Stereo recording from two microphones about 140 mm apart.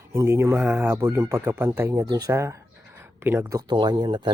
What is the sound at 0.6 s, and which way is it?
Speech, 10° right (ahead or behind).